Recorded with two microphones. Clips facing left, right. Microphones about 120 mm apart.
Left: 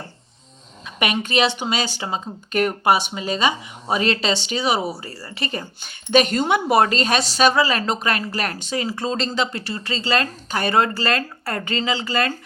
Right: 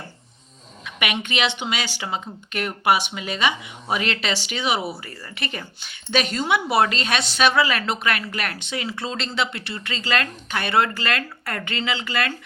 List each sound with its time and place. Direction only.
0.9 s speech: 35° left (ahead or behind)